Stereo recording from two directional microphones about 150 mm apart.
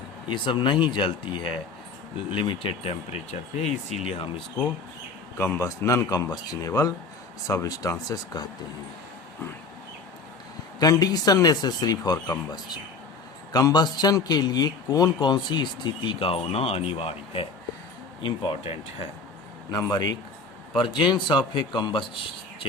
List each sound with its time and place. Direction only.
0.3 s speech: 30° left (ahead or behind)
5.4 s a man's voice: 20° left (ahead or behind)
10.8 s a man's voice: 25° left (ahead or behind)
19.7 s a man's voice: 25° left (ahead or behind)